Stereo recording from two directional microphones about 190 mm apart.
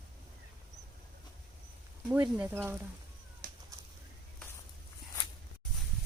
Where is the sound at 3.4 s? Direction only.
50° right (ahead or behind).